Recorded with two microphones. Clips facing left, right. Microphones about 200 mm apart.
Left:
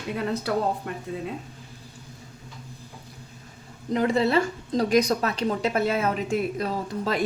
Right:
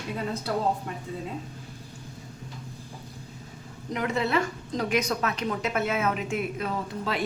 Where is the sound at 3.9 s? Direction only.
35° left (ahead or behind).